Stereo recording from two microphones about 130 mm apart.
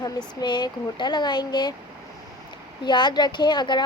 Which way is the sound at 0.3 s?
35° left (ahead or behind).